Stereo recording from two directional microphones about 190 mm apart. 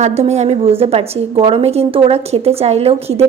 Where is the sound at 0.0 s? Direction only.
35° right (ahead or behind).